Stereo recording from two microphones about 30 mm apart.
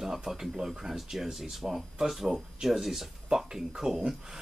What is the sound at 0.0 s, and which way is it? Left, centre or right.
Speech, centre.